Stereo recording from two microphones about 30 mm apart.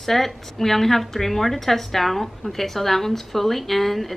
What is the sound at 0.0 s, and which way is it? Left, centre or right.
A woman's voice, centre.